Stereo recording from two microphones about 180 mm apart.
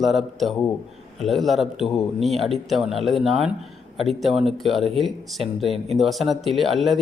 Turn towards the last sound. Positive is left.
turn(degrees=0)  # may be behind; listen again after turning